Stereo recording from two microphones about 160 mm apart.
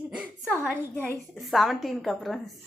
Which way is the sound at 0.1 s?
10° right (ahead or behind).